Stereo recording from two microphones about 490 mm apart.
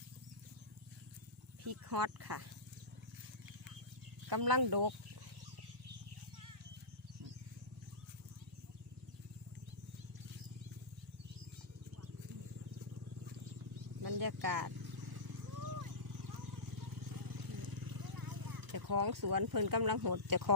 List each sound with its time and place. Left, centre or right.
1.9 s speech: right
4.3 s speech: right
14.0 s wild animals: right